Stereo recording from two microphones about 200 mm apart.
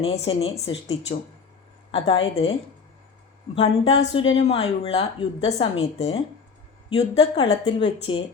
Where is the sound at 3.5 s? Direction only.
30° left (ahead or behind).